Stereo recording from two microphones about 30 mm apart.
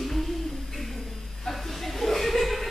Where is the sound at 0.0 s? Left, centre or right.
Centre.